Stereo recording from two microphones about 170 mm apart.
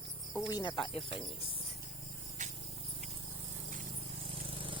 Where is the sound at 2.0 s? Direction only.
40° right (ahead or behind).